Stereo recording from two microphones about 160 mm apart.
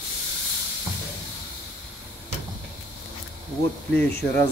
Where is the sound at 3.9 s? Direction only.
5° left (ahead or behind).